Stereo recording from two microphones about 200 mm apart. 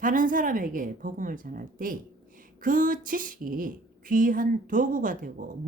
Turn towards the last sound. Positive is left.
turn(degrees=-40)  # may be behind; listen again after turning